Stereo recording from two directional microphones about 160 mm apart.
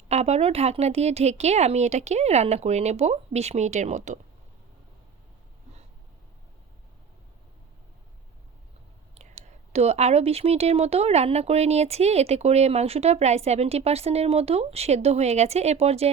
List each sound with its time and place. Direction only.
0.1 s speech: 40° right (ahead or behind)
9.1 s speech: 40° right (ahead or behind)